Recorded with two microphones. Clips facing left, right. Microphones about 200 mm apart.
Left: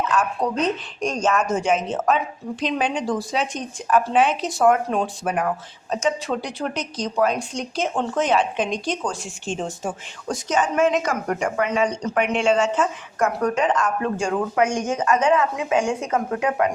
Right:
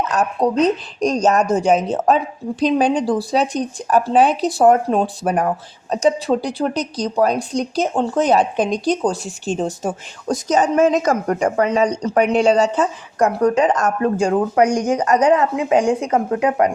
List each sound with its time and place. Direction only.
0.1 s a woman's voice: 40° right (ahead or behind)